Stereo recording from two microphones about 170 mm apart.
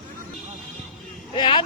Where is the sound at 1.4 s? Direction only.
30° left (ahead or behind).